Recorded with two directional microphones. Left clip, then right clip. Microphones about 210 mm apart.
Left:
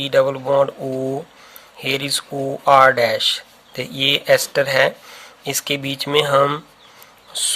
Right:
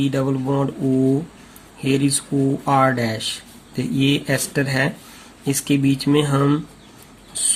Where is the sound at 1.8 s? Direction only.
40° left (ahead or behind).